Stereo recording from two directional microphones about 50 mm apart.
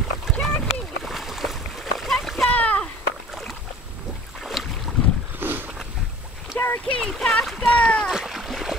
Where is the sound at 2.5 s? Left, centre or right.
Left.